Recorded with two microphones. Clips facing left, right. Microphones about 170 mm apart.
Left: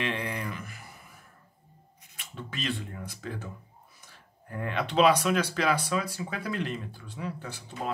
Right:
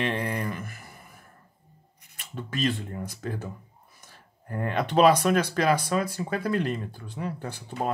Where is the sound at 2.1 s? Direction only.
45° right (ahead or behind).